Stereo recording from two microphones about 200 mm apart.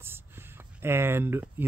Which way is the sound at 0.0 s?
10° right (ahead or behind).